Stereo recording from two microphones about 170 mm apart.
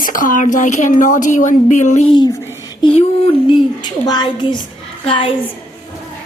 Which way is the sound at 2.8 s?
35° left (ahead or behind).